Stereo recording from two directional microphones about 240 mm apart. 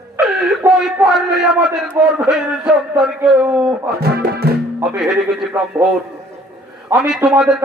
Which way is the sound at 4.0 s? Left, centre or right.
Right.